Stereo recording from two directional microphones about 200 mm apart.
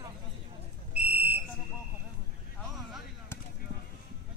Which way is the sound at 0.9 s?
10° right (ahead or behind).